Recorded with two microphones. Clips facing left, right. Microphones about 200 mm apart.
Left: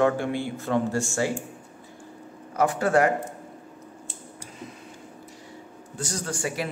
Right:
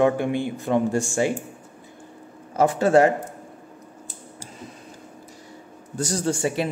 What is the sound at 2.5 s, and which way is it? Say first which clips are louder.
Speech: right 4 dB; 25° right (ahead or behind).